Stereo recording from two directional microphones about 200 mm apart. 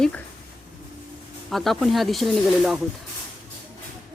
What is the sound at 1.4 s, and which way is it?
Speech, centre (ahead or behind).